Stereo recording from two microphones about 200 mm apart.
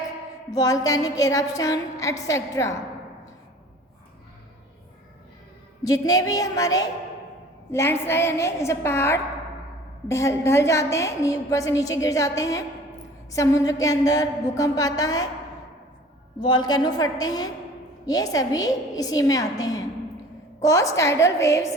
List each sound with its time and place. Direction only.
0.5 s a woman's voice: 20° left (ahead or behind)
5.8 s a woman's voice: 20° left (ahead or behind)
16.4 s a woman's voice: 20° left (ahead or behind)